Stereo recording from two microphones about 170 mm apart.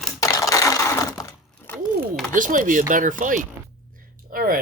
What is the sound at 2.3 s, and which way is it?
Speech, 50° right (ahead or behind).